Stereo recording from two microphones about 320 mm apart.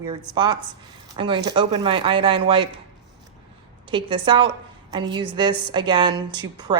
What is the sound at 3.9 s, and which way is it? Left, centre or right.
A woman's voice, centre.